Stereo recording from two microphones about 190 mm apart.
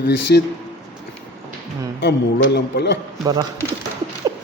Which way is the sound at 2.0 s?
60° left (ahead or behind).